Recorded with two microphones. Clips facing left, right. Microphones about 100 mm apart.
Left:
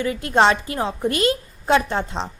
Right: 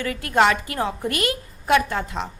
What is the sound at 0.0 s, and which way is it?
A woman's voice, 25° left (ahead or behind).